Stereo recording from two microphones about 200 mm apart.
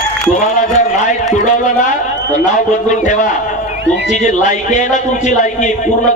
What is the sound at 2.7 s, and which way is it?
A man's voice, 40° left (ahead or behind).